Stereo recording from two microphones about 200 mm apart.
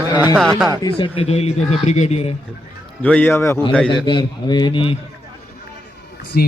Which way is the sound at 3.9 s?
20° left (ahead or behind).